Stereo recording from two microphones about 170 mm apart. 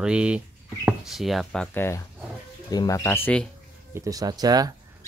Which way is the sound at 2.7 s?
20° left (ahead or behind).